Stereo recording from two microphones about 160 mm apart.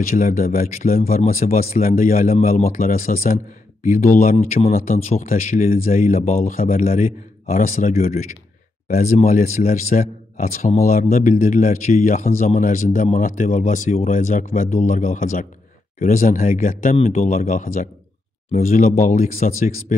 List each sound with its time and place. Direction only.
0.1 s speech: 60° left (ahead or behind)
7.9 s speech: 45° left (ahead or behind)
10.8 s speech: 65° left (ahead or behind)
16.9 s speech: 40° left (ahead or behind)
17.3 s speech: 55° left (ahead or behind)